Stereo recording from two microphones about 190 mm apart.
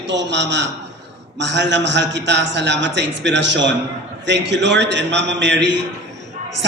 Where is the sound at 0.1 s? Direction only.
70° right (ahead or behind).